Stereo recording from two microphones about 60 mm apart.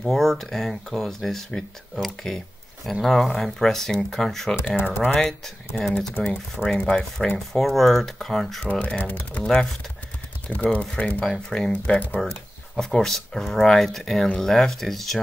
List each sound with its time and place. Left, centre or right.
0.1 s speech: centre
5.0 s speech: centre
5.9 s speech: centre
8.6 s speech: left
9.4 s speech: centre
11.2 s speech: centre